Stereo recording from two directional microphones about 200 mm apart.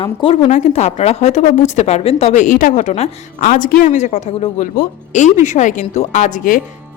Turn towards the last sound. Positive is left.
turn(degrees=40)  # may be behind; listen again after turning